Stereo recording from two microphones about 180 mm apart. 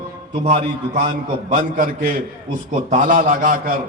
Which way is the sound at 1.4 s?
50° right (ahead or behind).